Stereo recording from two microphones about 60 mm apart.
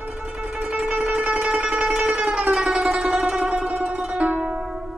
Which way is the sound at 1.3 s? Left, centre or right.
Right.